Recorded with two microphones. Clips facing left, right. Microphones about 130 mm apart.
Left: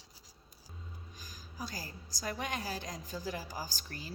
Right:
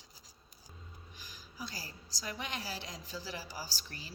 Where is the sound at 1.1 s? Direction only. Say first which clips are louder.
Left 2 dB; 45° left (ahead or behind).